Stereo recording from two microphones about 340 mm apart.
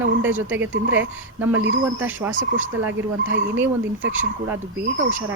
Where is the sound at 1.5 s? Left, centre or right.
Right.